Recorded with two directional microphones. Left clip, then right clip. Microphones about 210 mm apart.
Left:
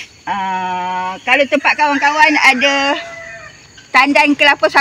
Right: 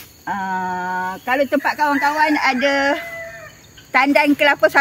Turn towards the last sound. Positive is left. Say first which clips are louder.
# left 3 dB
turn(degrees=-30)  # may be behind; listen again after turning